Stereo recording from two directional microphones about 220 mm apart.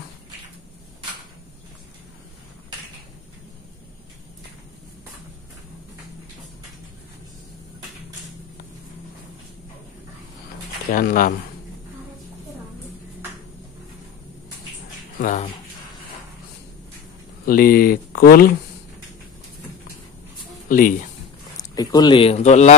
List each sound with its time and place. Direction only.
10.9 s speech: 40° left (ahead or behind)
15.1 s speech: 40° left (ahead or behind)
17.5 s speech: 40° left (ahead or behind)
20.6 s speech: 40° left (ahead or behind)
21.5 s speech: 20° left (ahead or behind)